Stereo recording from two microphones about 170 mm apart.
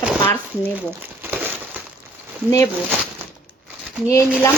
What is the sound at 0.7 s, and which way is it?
Crumpling, 10° right (ahead or behind).